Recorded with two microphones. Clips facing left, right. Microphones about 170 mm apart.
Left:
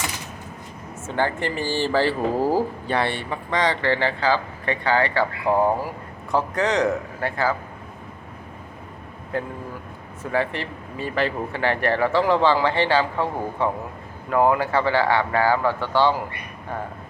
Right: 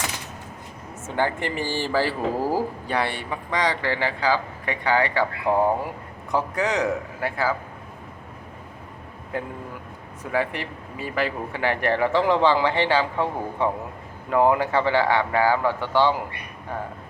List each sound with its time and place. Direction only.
1.0 s a man's voice: 15° right (ahead or behind)
9.3 s a man's voice: 15° right (ahead or behind)